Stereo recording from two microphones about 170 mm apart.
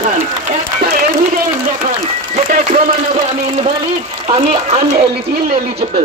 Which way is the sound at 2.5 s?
45° right (ahead or behind).